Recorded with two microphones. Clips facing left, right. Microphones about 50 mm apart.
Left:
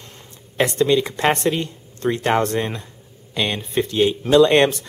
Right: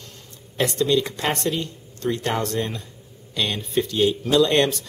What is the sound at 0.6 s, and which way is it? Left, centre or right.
Speech, left.